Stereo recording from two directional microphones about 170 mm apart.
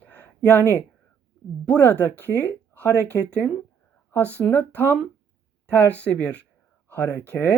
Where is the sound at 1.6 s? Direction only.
10° left (ahead or behind).